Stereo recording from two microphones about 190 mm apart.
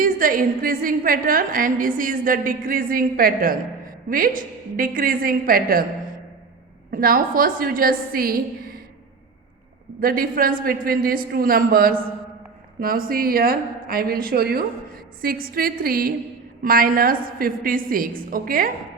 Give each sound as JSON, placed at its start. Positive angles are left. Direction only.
{"t": 0.0, "sound": "a man's voice", "side_deg": -45}
{"t": 6.9, "sound": "a man's voice", "side_deg": -50}
{"t": 10.0, "sound": "a man's voice", "side_deg": -50}